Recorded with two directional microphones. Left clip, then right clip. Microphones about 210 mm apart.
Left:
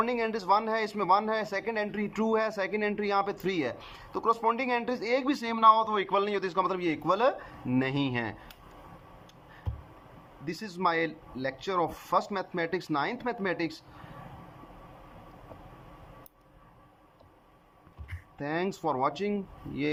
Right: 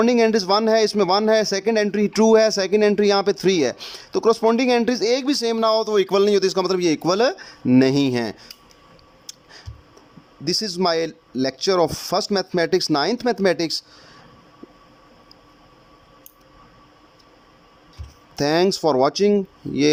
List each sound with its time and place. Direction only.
0.0 s a man's voice: 55° right (ahead or behind)
10.4 s a man's voice: 50° right (ahead or behind)
18.3 s speech: 55° right (ahead or behind)